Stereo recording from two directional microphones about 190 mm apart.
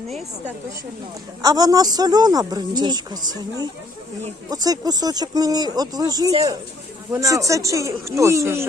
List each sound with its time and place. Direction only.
1.4 s speech: 20° right (ahead or behind)
4.4 s speech: 20° right (ahead or behind)